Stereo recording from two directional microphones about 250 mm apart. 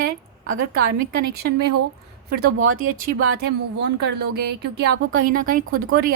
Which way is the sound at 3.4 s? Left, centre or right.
Right.